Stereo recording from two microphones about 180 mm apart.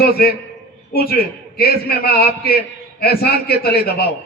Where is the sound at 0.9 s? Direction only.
60° left (ahead or behind).